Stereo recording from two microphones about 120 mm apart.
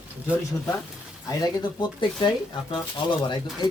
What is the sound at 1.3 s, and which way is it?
Speech, 30° left (ahead or behind).